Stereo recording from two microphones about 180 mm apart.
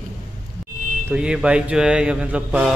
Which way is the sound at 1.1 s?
5° right (ahead or behind).